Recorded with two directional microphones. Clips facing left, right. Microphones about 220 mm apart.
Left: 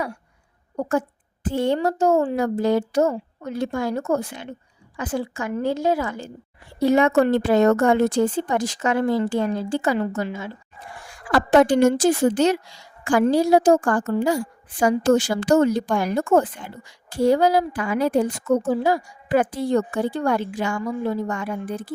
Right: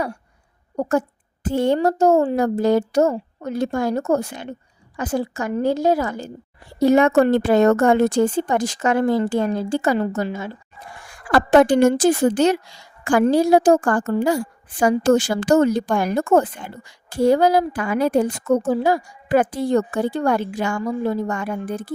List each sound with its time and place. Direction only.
0.8 s a woman's voice: 40° right (ahead or behind)
11.3 s a woman's voice: 55° right (ahead or behind)